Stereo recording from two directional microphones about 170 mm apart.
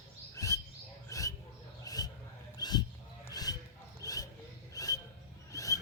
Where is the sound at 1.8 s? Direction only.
20° left (ahead or behind).